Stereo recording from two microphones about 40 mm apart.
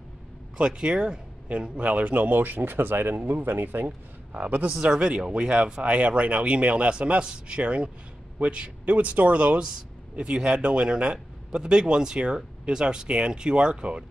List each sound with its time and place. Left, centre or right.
0.7 s speech: right
1.8 s speech: right
4.3 s speech: right
4.8 s speech: right